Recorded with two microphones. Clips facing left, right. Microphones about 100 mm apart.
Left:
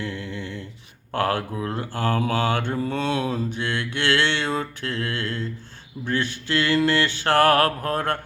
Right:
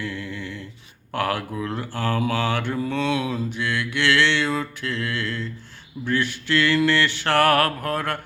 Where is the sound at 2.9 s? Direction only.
45° left (ahead or behind).